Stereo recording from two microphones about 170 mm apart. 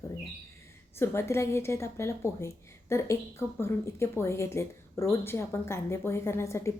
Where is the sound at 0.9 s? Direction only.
15° left (ahead or behind).